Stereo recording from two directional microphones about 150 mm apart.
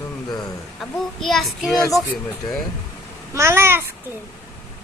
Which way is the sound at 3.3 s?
20° right (ahead or behind).